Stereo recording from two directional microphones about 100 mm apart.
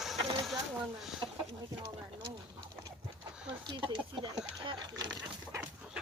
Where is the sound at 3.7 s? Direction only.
50° right (ahead or behind).